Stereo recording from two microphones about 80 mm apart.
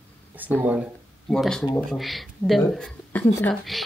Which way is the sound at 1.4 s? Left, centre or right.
Centre.